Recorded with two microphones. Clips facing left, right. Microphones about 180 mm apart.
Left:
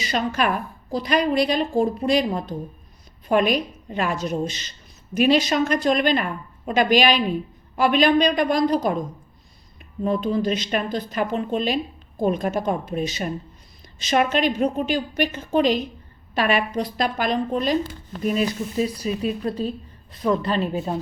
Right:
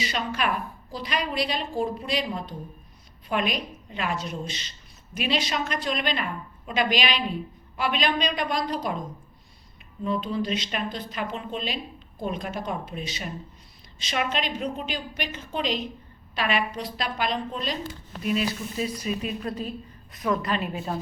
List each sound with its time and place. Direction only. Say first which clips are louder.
0.0 s speech: left 5 dB; 45° left (ahead or behind)
10.0 s a woman's voice: left 6 dB; 45° left (ahead or behind)